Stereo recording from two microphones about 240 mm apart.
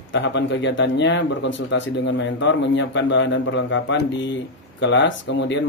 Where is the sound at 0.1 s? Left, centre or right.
Left.